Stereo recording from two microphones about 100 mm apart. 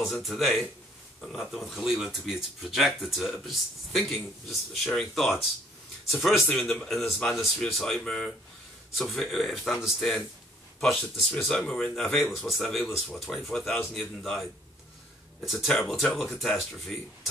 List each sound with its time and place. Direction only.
0.0 s speech: centre (ahead or behind)
6.4 s speech: 10° left (ahead or behind)